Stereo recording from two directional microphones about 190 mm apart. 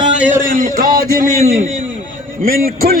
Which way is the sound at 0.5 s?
45° right (ahead or behind).